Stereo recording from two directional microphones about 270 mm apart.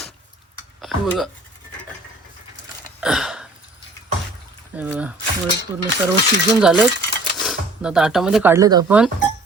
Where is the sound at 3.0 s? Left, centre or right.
Centre.